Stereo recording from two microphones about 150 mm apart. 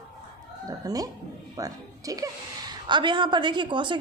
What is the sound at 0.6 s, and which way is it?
A woman's voice, 25° right (ahead or behind).